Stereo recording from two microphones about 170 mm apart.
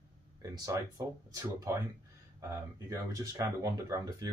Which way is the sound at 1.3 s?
20° right (ahead or behind).